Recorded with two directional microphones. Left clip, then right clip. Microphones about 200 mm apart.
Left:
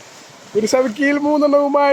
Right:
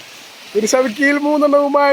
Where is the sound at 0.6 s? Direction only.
5° right (ahead or behind).